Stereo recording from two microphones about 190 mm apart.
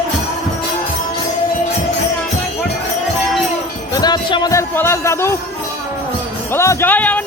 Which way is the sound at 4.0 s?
20° left (ahead or behind).